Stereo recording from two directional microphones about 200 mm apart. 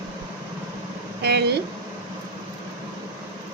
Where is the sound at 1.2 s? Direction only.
55° right (ahead or behind).